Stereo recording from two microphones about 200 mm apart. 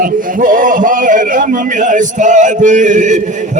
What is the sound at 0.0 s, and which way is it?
Speech, 45° right (ahead or behind).